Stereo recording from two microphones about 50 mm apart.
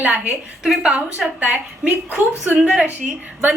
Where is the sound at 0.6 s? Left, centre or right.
Centre.